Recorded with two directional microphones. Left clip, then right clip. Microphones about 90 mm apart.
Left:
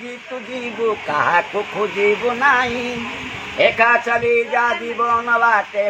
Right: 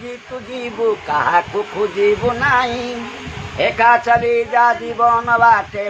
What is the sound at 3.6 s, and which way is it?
A man's voice, 30° right (ahead or behind).